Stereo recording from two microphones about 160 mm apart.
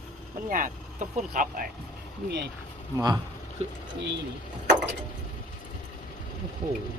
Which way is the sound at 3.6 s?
40° right (ahead or behind).